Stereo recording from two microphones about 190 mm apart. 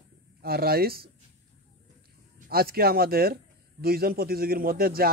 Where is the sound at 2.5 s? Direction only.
55° right (ahead or behind).